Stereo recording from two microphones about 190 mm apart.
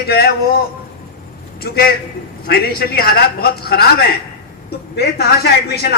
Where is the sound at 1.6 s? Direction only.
55° left (ahead or behind).